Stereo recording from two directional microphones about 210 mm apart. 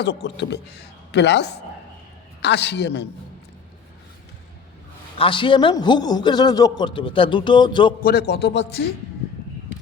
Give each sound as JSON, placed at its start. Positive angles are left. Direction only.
{"t": 0.0, "sound": "a woman's voice", "side_deg": 60}
{"t": 5.1, "sound": "a man's voice", "side_deg": 25}
{"t": 8.0, "sound": "a man's voice", "side_deg": 50}